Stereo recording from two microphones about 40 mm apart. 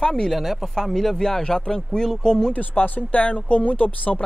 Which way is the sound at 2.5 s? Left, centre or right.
Left.